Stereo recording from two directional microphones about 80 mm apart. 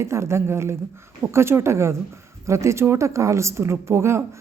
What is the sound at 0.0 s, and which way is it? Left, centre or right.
A woman's voice, right.